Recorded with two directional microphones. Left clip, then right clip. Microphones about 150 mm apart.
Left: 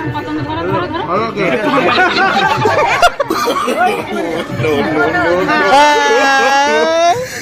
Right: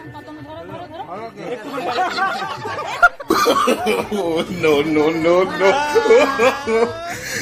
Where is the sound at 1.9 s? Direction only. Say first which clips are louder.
Left 9 dB; 40° right (ahead or behind).